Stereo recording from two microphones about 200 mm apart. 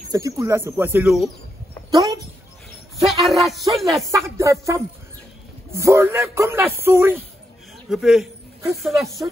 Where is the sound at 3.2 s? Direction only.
Centre (ahead or behind).